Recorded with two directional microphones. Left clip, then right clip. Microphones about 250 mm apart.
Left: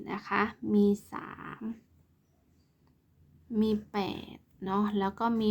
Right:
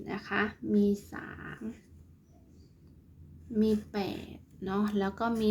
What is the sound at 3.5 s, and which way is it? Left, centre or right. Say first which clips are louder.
Speech: even; left.